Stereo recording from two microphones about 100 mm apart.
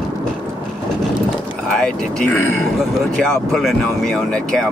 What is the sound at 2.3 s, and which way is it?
Speech, 25° left (ahead or behind).